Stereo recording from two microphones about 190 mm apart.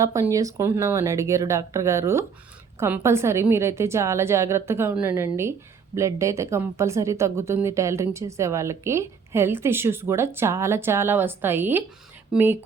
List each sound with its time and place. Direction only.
0.0 s a woman's voice: 15° right (ahead or behind)